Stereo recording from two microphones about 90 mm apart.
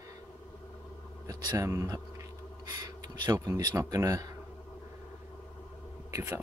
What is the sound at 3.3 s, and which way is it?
Speech, 40° right (ahead or behind).